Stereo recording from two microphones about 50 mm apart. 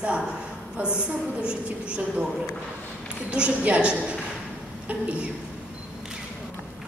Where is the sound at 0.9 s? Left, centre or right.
Right.